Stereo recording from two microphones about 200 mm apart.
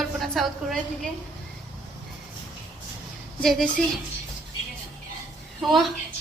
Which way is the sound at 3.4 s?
Centre (ahead or behind).